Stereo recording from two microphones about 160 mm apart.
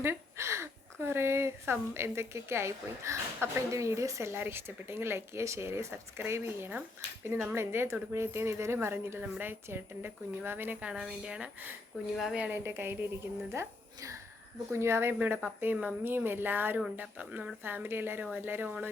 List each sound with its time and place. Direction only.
0.0 s a woman's voice: 15° right (ahead or behind)